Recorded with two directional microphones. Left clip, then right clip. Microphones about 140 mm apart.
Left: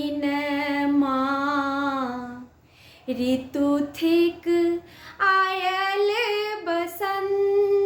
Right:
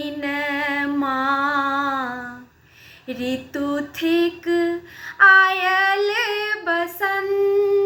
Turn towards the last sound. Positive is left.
turn(degrees=50)  # may be behind; listen again after turning